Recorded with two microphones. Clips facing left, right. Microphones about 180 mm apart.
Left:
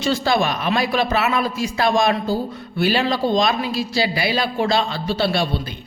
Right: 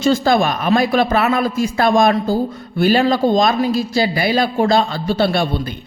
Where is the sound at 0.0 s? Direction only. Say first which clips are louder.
Right 5 dB; 50° right (ahead or behind).